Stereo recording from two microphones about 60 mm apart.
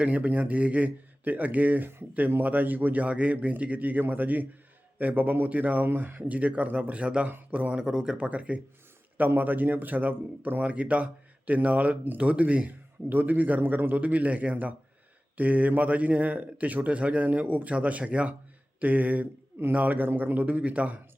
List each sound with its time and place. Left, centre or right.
0.0 s a man's voice: right